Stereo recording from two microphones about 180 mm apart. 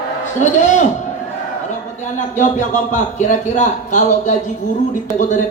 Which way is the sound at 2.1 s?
45° left (ahead or behind).